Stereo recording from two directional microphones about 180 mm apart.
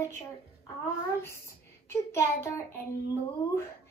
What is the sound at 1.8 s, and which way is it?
Speech, 15° left (ahead or behind).